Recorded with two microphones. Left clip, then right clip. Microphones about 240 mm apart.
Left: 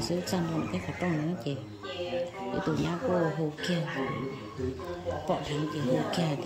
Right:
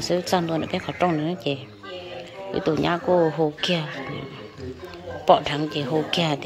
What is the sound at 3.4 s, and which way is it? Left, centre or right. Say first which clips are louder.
Speech: right 11 dB; centre.